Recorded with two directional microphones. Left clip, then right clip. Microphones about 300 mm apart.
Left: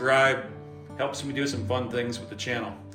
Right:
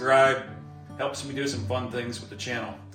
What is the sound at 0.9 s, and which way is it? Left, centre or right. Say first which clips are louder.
Speech: left 1 dB; centre.